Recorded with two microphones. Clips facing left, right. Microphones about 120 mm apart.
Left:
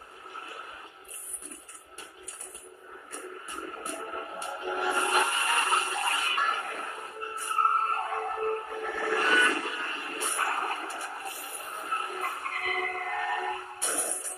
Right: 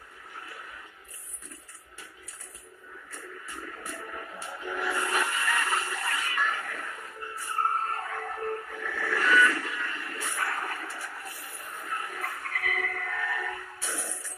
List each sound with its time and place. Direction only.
3.1 s vehicle: 25° left (ahead or behind)